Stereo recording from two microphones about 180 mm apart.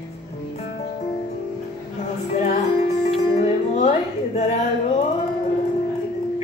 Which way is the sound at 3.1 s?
35° left (ahead or behind).